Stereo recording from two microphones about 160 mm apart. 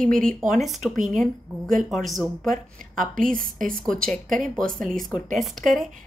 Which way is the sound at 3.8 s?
5° left (ahead or behind).